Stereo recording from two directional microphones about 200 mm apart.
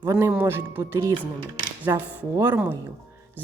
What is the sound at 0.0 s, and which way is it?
Speech, 15° right (ahead or behind).